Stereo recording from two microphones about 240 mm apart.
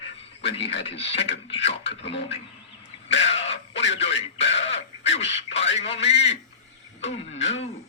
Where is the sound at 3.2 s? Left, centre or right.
Left.